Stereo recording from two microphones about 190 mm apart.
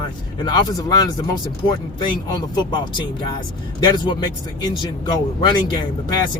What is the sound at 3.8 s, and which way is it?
A man's voice, 25° left (ahead or behind).